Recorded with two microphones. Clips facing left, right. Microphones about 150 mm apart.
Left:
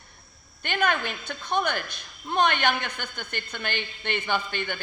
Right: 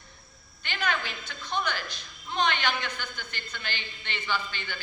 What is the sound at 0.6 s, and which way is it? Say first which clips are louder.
A man's voice: left 5 dB; 55° left (ahead or behind).